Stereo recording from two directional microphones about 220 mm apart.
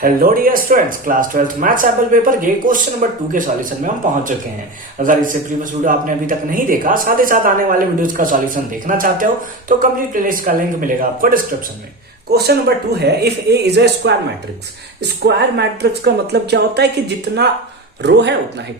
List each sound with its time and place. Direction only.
0.0 s speech: 40° right (ahead or behind)
15.2 s speech: 50° right (ahead or behind)
18.0 s speech: 50° right (ahead or behind)